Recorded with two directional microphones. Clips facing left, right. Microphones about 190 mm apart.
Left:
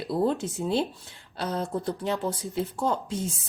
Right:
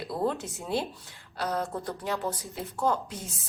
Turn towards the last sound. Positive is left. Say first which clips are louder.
# left 1 dB
turn(degrees=30)  # may be behind; listen again after turning